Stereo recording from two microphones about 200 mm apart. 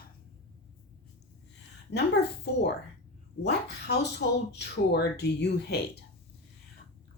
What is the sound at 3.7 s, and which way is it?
Speech, 55° left (ahead or behind).